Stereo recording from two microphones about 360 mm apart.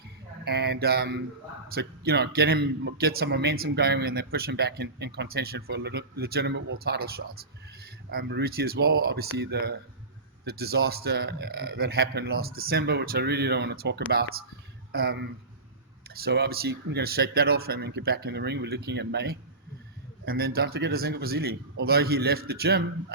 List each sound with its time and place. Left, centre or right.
0.4 s a man's voice: right